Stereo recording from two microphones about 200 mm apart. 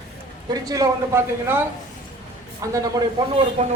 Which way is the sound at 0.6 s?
15° right (ahead or behind).